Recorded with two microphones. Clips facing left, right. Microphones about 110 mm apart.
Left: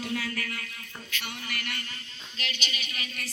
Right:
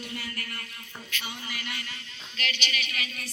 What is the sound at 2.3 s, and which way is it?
Speech, 25° left (ahead or behind).